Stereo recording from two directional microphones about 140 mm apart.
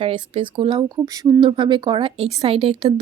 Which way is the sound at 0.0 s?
40° right (ahead or behind).